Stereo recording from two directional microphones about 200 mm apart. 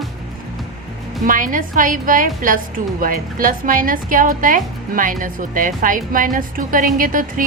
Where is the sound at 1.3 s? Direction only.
40° right (ahead or behind).